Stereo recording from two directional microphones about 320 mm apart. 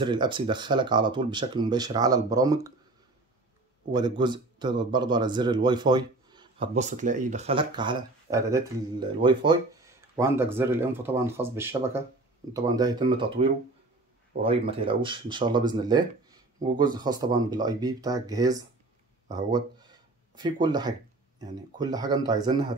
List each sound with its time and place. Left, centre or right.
0.0 s speech: centre
3.9 s speech: centre